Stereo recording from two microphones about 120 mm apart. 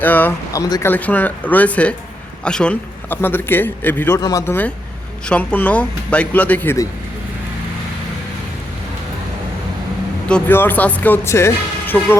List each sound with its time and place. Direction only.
0.0 s speech: 15° left (ahead or behind)
0.5 s speech: 30° left (ahead or behind)
0.9 s a man's voice: 15° left (ahead or behind)
4.2 s speech: 30° left (ahead or behind)
4.4 s speech: 15° left (ahead or behind)
10.5 s speech: 15° left (ahead or behind)